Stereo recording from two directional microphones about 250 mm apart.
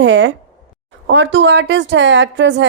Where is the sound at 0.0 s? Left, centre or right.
Right.